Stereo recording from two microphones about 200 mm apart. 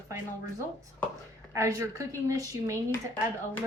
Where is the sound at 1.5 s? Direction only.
15° right (ahead or behind).